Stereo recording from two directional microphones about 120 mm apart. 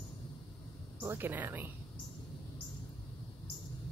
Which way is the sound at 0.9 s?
15° right (ahead or behind).